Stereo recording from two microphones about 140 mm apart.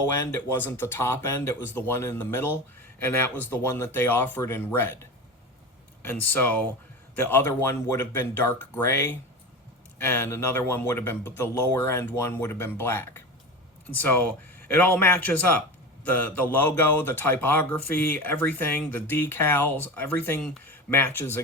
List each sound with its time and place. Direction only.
0.1 s speech: 15° left (ahead or behind)
6.1 s speech: 15° left (ahead or behind)